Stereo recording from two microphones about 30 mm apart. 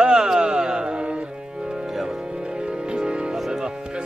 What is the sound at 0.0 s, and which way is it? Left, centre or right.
Music, right.